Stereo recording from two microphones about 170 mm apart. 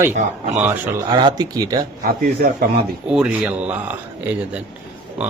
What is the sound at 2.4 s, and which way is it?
Speech, 60° right (ahead or behind).